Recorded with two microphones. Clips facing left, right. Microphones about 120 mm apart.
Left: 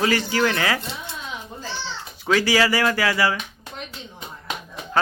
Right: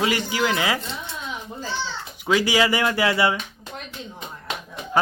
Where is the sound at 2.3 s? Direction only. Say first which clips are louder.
Even; 15° right (ahead or behind).